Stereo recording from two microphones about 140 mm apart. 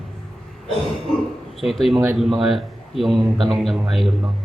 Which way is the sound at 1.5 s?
Centre (ahead or behind).